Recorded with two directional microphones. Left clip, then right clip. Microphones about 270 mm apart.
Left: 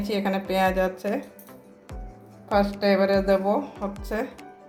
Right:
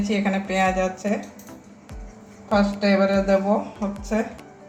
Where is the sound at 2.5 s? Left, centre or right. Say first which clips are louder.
Right 1 dB; left.